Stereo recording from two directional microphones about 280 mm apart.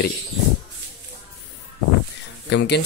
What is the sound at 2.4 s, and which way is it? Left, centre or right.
Speech, left.